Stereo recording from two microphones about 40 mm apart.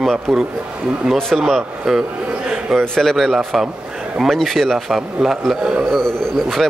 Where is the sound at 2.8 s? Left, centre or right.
Centre.